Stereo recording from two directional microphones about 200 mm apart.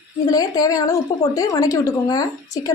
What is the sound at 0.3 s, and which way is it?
A woman's voice, 20° left (ahead or behind).